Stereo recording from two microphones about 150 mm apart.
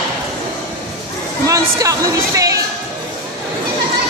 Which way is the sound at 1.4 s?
25° right (ahead or behind).